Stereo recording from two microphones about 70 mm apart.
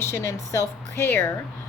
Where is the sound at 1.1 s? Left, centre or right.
Left.